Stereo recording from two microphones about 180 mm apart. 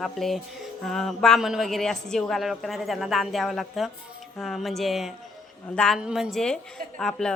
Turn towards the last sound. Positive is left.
turn(degrees=5)  # may be behind; listen again after turning